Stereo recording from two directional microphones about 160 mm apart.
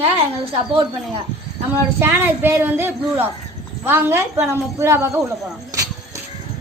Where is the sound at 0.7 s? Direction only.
35° right (ahead or behind).